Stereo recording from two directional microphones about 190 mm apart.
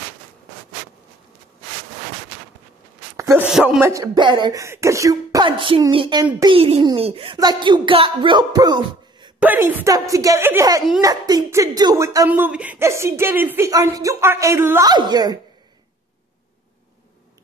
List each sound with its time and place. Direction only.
3.2 s a sound: 15° right (ahead or behind)
3.4 s a child's voice: 5° right (ahead or behind); by 9.3 s 20° right (ahead or behind)
9.4 s speech: 10° right (ahead or behind)